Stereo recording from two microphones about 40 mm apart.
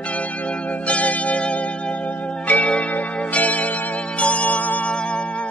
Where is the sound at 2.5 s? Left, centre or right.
Left.